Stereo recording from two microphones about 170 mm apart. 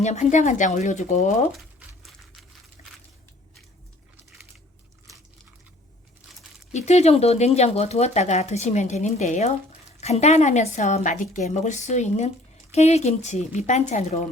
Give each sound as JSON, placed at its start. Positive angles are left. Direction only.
{"t": 0.0, "sound": "speech", "side_deg": 40}
{"t": 2.8, "sound": "a sound", "side_deg": 50}
{"t": 6.7, "sound": "speech", "side_deg": 40}